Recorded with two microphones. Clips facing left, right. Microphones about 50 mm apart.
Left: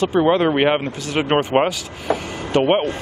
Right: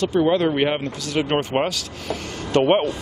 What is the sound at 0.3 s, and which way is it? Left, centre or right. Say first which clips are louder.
Speech: left 3 dB; left.